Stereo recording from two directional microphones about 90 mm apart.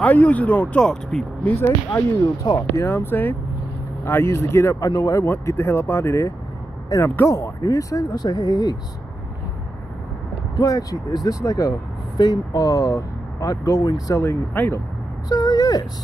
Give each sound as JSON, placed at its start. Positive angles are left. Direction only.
{"t": 0.0, "sound": "speech", "side_deg": 15}
{"t": 1.4, "sound": "speech", "side_deg": 20}
{"t": 2.2, "sound": "speech", "side_deg": 45}
{"t": 2.8, "sound": "speech", "side_deg": 25}
{"t": 5.2, "sound": "speech", "side_deg": 30}
{"t": 10.5, "sound": "speech", "side_deg": 45}
{"t": 14.2, "sound": "speech", "side_deg": 25}
{"t": 15.2, "sound": "vehicle", "side_deg": 50}